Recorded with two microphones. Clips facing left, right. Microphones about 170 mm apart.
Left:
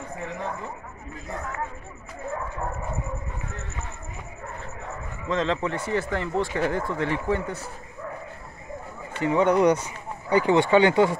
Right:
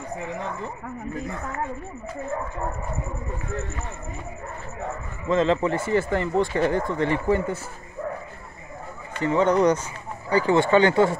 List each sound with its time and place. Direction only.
5.3 s speech: 5° right (ahead or behind)
9.2 s speech: 10° left (ahead or behind)